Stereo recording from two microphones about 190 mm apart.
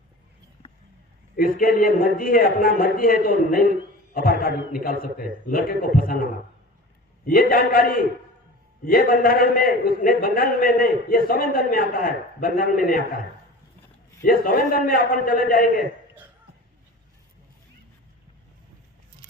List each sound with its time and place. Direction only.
1.4 s a man's voice: 50° left (ahead or behind)
7.3 s a man's voice: 50° left (ahead or behind)
14.3 s a man's voice: 50° left (ahead or behind)